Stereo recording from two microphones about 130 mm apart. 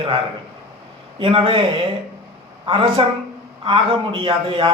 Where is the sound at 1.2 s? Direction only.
45° right (ahead or behind).